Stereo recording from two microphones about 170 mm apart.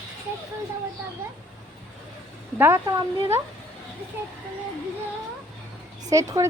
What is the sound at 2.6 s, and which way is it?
Speech, 15° right (ahead or behind).